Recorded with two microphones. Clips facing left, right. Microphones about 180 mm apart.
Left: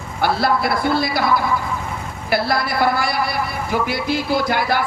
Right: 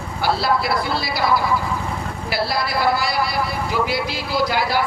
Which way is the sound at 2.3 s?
50° left (ahead or behind).